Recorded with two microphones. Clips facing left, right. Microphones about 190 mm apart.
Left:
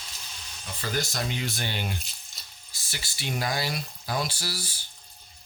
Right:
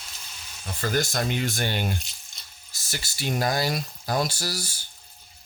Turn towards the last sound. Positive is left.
turn(degrees=-45)  # may be behind; listen again after turning